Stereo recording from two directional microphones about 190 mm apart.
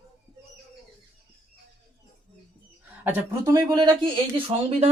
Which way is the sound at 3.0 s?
10° right (ahead or behind).